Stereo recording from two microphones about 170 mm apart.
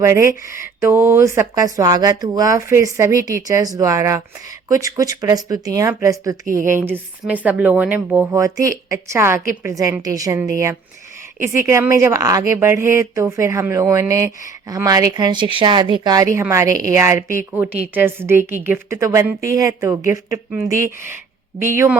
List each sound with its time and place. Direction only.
0.0 s speech: 15° right (ahead or behind)
6.4 s speech: 50° right (ahead or behind)
6.7 s speech: 15° right (ahead or behind)